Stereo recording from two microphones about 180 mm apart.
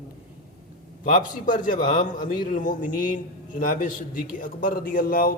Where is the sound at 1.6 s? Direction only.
45° left (ahead or behind).